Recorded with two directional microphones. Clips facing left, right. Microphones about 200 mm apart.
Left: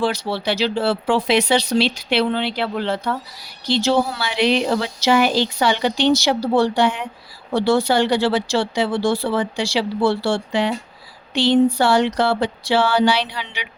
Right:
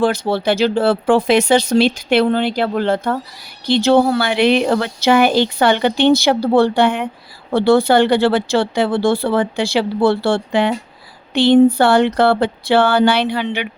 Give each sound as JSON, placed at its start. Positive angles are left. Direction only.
{"t": 0.0, "sound": "speech", "side_deg": -50}